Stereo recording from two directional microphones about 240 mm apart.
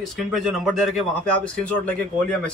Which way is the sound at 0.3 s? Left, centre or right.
Centre.